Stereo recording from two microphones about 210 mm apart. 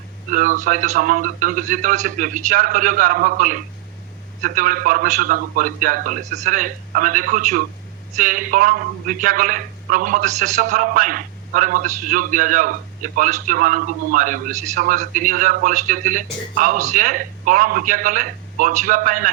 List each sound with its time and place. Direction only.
0.3 s a man's voice: 40° right (ahead or behind)